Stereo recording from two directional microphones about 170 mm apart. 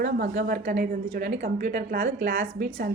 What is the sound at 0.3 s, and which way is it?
Speech, 65° right (ahead or behind).